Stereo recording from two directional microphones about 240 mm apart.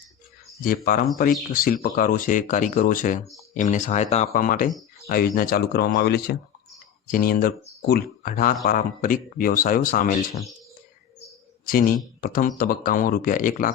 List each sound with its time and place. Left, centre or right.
1.5 s speech: left
11.6 s speech: left